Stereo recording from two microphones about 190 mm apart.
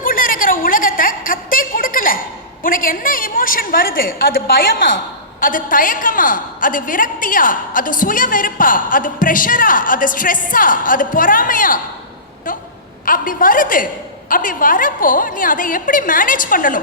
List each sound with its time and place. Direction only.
0.0 s a sound: 45° left (ahead or behind)
2.6 s a woman's voice: 45° left (ahead or behind)
13.1 s a woman's voice: 45° left (ahead or behind)